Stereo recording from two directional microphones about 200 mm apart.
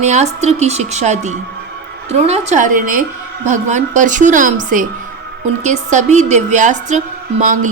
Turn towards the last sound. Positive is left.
turn(degrees=-40)  # may be behind; listen again after turning